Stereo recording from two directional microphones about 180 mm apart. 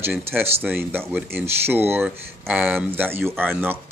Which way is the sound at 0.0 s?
10° right (ahead or behind).